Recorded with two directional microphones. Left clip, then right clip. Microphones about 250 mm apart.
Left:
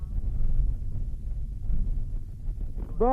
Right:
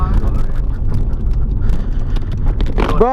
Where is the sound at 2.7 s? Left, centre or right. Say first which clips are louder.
Right 14 dB; centre.